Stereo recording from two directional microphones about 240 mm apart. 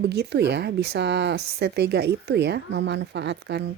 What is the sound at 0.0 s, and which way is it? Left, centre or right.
Speech, right.